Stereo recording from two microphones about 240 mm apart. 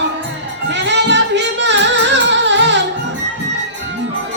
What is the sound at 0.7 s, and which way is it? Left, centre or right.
Music, right.